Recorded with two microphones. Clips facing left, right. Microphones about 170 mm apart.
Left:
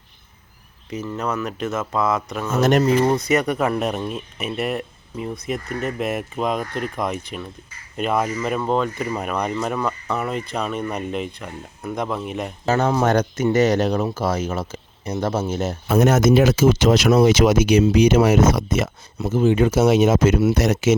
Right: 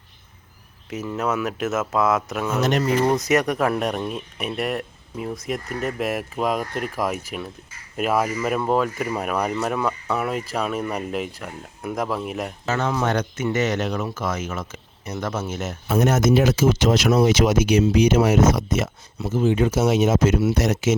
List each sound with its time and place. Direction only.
0.9 s speech: 5° right (ahead or behind)
2.6 s speech: 45° left (ahead or behind)
3.0 s speech: centre (ahead or behind)
12.6 s speech: 35° left (ahead or behind)
15.9 s speech: 75° left (ahead or behind)